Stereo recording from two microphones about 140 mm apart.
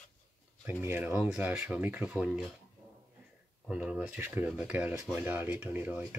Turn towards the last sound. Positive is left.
turn(degrees=-10)  # may be behind; listen again after turning